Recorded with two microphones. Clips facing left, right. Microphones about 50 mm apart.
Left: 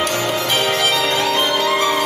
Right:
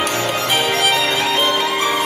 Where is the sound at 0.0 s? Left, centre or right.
Centre.